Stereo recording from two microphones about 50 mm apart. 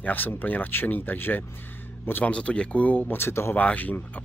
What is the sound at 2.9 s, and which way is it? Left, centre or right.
Speech, left.